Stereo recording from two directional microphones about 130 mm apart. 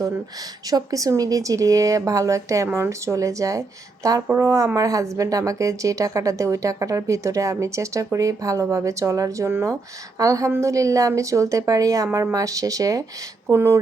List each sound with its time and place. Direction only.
0.7 s speech: 30° right (ahead or behind)